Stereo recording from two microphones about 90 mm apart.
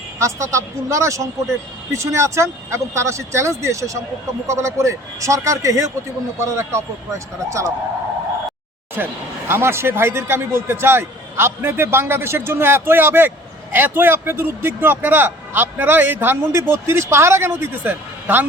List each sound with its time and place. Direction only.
0.2 s speech: 35° right (ahead or behind)
9.5 s a man's voice: 25° right (ahead or behind)